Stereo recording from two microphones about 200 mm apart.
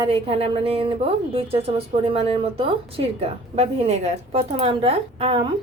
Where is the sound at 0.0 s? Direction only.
30° right (ahead or behind).